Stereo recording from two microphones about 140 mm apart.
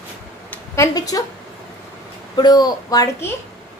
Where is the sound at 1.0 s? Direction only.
25° left (ahead or behind).